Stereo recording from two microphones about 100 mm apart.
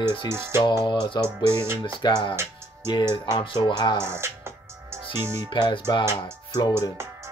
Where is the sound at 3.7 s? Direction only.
50° left (ahead or behind).